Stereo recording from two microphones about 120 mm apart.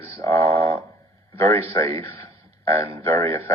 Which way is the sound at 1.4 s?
25° left (ahead or behind).